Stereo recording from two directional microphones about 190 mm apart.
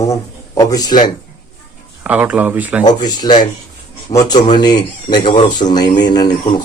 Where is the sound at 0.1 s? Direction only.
15° left (ahead or behind).